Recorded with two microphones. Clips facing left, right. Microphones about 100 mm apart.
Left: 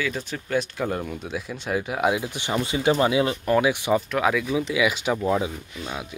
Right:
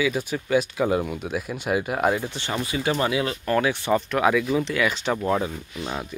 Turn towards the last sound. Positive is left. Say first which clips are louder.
# right 2 dB
turn(degrees=0)  # may be behind; listen again after turning